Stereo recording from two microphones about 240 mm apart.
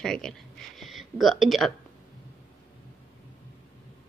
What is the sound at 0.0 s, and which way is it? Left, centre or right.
Speech, centre.